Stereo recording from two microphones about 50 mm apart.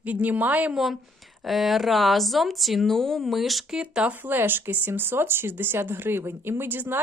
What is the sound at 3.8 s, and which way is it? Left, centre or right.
Speech, right.